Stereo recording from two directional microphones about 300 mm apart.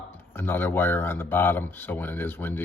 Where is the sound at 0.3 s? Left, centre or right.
Centre.